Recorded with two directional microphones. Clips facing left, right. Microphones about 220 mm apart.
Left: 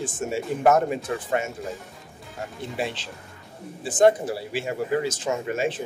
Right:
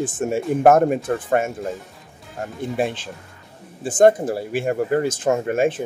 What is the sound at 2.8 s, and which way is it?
Speech, 50° right (ahead or behind).